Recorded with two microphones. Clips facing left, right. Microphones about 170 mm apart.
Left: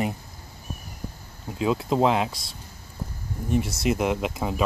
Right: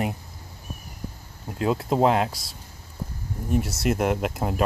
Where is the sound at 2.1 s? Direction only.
45° right (ahead or behind).